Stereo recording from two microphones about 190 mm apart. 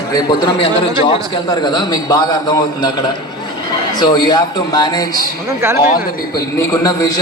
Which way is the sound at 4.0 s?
20° left (ahead or behind).